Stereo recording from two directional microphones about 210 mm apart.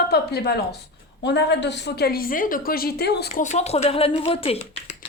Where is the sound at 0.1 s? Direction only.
50° left (ahead or behind).